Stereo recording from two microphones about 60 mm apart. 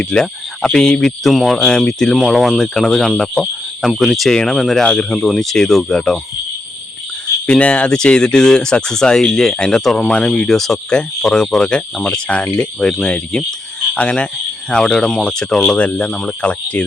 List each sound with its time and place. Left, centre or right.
0.0 s speech: centre
1.5 s speech: centre
4.8 s speech: centre
7.4 s speech: centre